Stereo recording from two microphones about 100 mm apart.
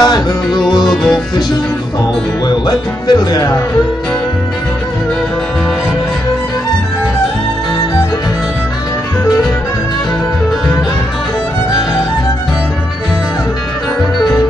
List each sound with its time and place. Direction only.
0.0 s speech: 45° left (ahead or behind)
0.8 s music: 5° left (ahead or behind)
2.4 s speech: 45° left (ahead or behind)